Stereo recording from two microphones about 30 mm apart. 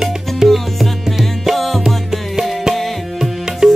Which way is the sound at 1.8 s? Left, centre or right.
Centre.